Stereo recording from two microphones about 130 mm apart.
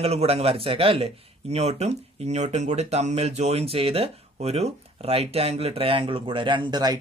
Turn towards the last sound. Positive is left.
turn(degrees=-35)  # may be behind; listen again after turning